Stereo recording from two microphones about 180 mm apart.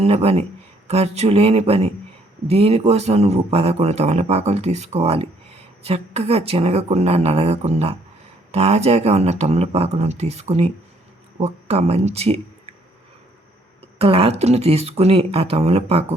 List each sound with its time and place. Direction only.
0.0 s speech: 35° right (ahead or behind)
14.0 s speech: 35° right (ahead or behind)